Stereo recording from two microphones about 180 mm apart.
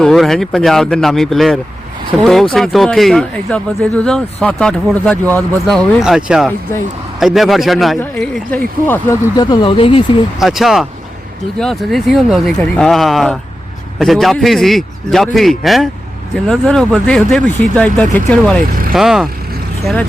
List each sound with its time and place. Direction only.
0.0 s speech: centre (ahead or behind); by 10.0 s 30° left (ahead or behind)
10.4 s speech: centre (ahead or behind)
18.6 s speech: 50° right (ahead or behind)
18.9 s speech: centre (ahead or behind)